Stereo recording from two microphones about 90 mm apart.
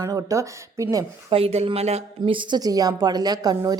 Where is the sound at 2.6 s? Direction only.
45° right (ahead or behind).